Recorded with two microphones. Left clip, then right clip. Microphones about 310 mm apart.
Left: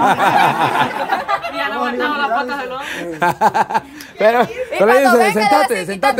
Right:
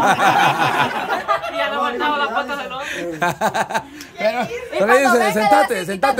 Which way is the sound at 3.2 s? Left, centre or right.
Centre.